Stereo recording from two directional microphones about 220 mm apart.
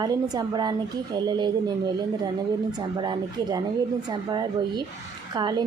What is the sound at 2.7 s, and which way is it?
A woman's voice, 20° right (ahead or behind).